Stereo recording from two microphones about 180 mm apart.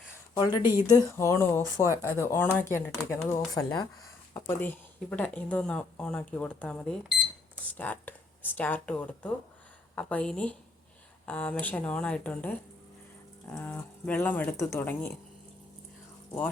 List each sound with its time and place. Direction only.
0.3 s a woman's voice: 25° left (ahead or behind); by 12.5 s 5° left (ahead or behind)
13.6 s speech: 10° left (ahead or behind)